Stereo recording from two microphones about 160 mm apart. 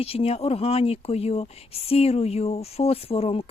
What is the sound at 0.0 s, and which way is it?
Speech, 40° left (ahead or behind).